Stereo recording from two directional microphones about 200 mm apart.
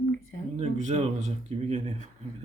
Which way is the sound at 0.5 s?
35° right (ahead or behind).